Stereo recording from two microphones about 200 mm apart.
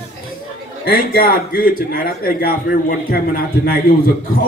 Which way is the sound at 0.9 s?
45° left (ahead or behind).